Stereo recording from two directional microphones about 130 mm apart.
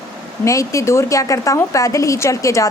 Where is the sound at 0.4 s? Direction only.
25° left (ahead or behind).